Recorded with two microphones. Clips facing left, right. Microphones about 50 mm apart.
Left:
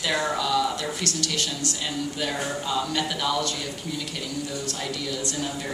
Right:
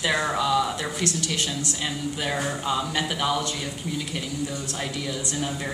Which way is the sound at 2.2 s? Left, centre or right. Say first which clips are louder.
Right 3 dB; centre.